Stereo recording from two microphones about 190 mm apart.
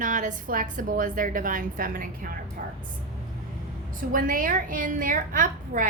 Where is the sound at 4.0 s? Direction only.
45° right (ahead or behind).